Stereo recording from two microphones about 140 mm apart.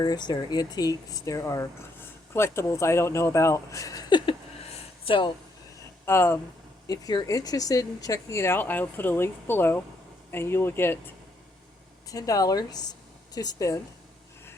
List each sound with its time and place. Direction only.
0.0 s speech: 30° left (ahead or behind)
5.0 s speech: 35° left (ahead or behind)
6.1 s speech: 15° left (ahead or behind)
12.0 s speech: 25° left (ahead or behind)